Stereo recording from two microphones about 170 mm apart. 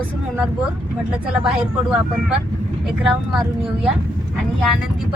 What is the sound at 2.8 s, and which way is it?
A woman's voice, centre (ahead or behind).